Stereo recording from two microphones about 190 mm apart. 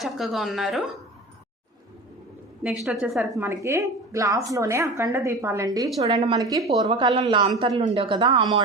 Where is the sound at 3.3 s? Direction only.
15° right (ahead or behind).